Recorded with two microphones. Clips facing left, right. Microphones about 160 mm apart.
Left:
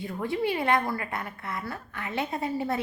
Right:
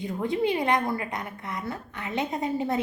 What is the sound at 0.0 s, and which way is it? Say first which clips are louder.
A woman's voice: right 2 dB; 20° right (ahead or behind).